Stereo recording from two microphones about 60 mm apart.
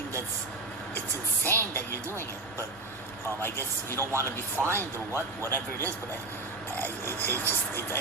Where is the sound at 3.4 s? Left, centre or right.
Left.